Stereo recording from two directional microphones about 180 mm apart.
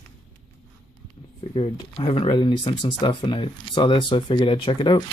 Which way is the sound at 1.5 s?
30° left (ahead or behind).